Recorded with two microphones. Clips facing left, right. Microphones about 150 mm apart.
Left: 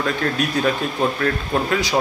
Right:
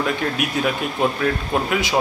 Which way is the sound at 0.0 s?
10° right (ahead or behind).